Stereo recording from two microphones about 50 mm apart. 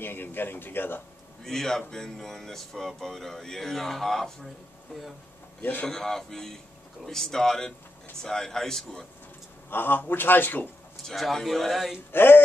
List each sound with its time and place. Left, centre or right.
0.0 s speech: left
1.4 s speech: centre
5.6 s a man's voice: left
5.9 s speech: centre
9.7 s a man's voice: left
11.1 s speech: centre
12.1 s speech: left